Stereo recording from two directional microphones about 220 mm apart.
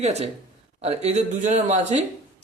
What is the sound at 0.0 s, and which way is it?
Speech, 30° right (ahead or behind).